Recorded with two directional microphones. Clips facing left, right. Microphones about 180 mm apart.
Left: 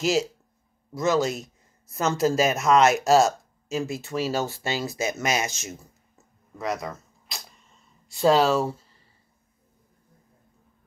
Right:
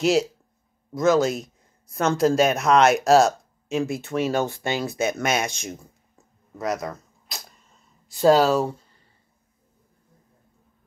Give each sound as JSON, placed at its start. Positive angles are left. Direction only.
{"t": 0.0, "sound": "speech", "side_deg": 0}
{"t": 6.6, "sound": "cap gun", "side_deg": 0}
{"t": 8.1, "sound": "speech", "side_deg": 0}